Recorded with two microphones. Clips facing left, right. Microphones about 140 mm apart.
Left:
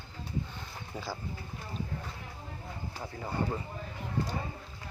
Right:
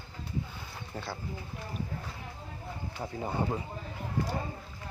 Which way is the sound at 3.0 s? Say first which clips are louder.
Right 4 dB; 20° right (ahead or behind).